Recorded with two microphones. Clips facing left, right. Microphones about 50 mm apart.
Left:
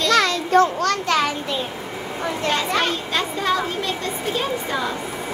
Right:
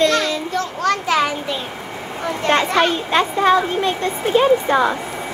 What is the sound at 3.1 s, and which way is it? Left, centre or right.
Speech, right.